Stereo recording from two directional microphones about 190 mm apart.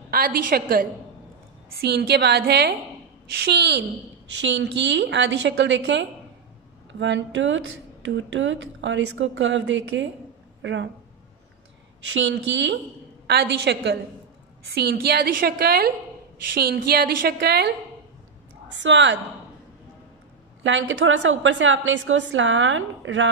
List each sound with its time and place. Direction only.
0.1 s a woman's voice: 50° right (ahead or behind); by 10.9 s 75° right (ahead or behind)
12.1 s speech: 75° right (ahead or behind)
13.3 s a woman's voice: 60° right (ahead or behind)
18.8 s speech: 75° right (ahead or behind)
20.6 s a woman's voice: 75° right (ahead or behind)